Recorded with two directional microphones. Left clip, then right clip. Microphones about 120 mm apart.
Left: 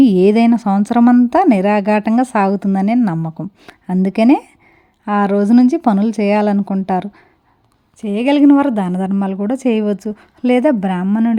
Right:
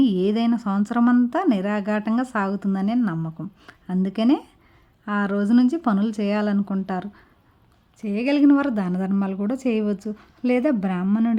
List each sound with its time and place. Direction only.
0.0 s a woman's voice: 45° left (ahead or behind); by 11.3 s 30° left (ahead or behind)